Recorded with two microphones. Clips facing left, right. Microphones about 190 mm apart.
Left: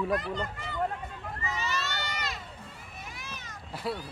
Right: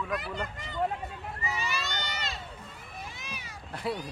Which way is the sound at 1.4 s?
10° right (ahead or behind).